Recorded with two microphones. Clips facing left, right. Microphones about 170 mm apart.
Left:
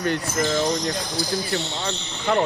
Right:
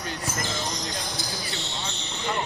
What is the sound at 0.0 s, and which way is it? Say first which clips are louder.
Speech: left 9 dB; 65° left (ahead or behind).